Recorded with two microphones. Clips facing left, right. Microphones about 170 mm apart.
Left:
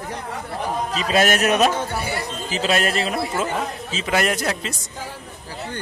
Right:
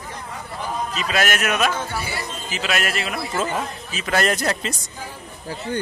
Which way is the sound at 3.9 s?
15° left (ahead or behind).